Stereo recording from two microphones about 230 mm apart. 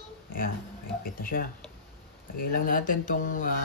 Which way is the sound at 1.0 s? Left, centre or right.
Left.